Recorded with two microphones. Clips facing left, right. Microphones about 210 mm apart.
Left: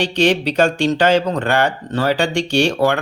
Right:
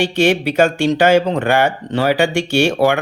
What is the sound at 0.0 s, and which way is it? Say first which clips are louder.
Speech: right 1 dB; 10° right (ahead or behind).